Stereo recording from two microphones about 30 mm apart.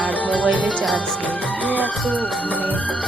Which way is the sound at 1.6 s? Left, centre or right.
Left.